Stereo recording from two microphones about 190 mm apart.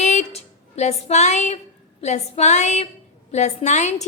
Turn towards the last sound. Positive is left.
turn(degrees=35)  # may be behind; listen again after turning